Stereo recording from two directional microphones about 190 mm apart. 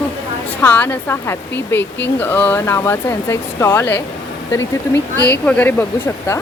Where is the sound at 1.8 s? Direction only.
65° left (ahead or behind).